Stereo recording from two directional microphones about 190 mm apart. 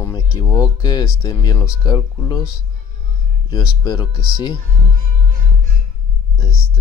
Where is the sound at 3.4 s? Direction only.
20° left (ahead or behind).